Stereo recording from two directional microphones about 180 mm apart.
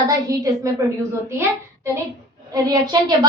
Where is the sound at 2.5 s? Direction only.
20° right (ahead or behind).